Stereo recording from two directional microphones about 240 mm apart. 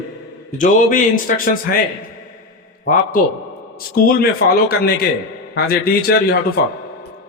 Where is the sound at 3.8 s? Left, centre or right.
Left.